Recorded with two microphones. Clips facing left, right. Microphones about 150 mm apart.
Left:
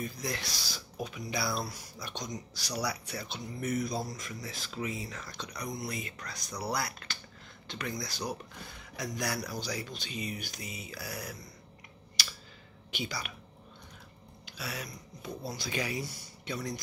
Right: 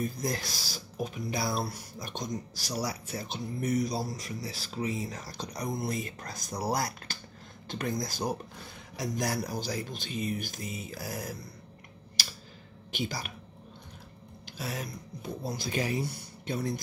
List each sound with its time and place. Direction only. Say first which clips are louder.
0.0 s speech: right 4 dB; 45° right (ahead or behind)
12.9 s speech: right 3 dB; 45° right (ahead or behind)
14.6 s speech: right 4 dB; 45° right (ahead or behind)